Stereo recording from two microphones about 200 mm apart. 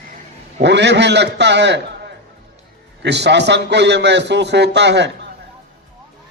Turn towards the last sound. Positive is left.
turn(degrees=-60)  # may be behind; listen again after turning